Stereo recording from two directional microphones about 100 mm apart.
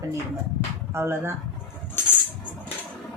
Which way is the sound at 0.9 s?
25° right (ahead or behind).